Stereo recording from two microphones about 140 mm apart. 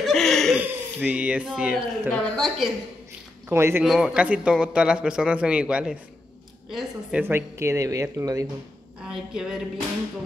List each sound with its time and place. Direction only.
0.0 s a sound: 5° left (ahead or behind)
0.6 s a sound: 10° right (ahead or behind)
1.5 s a woman's voice: 5° right (ahead or behind)
2.0 s a woman's voice: 5° left (ahead or behind)
3.4 s a man's voice: 15° right (ahead or behind)
3.8 s a man's voice: 5° right (ahead or behind)
7.2 s speech: 15° right (ahead or behind)
9.0 s a woman's voice: 5° right (ahead or behind)